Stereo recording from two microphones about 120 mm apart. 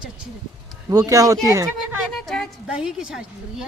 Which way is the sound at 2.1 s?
5° left (ahead or behind).